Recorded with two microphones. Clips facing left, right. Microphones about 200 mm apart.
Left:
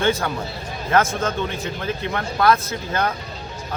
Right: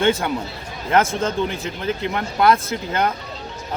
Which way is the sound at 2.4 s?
25° right (ahead or behind).